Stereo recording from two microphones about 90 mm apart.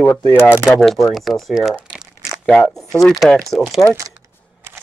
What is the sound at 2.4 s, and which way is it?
Speech, 5° left (ahead or behind).